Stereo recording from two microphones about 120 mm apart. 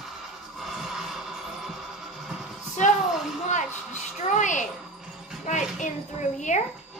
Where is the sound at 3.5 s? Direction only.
90° left.